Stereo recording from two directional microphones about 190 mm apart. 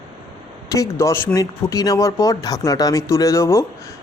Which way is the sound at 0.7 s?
15° left (ahead or behind).